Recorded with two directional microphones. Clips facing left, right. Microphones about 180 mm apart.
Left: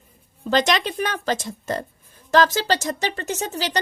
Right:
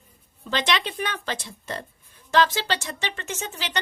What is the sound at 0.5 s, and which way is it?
Speech, 45° left (ahead or behind).